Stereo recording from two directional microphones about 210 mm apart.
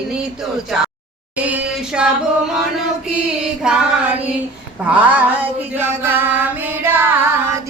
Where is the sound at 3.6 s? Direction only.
5° right (ahead or behind).